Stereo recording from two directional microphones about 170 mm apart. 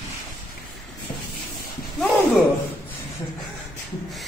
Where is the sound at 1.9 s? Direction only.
Centre (ahead or behind).